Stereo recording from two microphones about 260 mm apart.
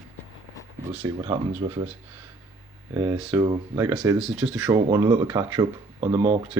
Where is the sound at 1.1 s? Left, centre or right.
Centre.